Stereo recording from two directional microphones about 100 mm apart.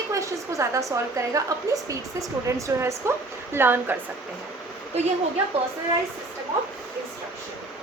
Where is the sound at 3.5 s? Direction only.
20° right (ahead or behind).